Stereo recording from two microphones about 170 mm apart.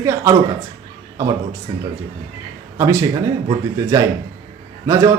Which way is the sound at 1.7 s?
25° right (ahead or behind).